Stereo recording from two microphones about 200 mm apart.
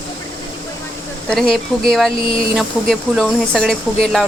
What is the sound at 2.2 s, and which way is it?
Speech, 25° left (ahead or behind).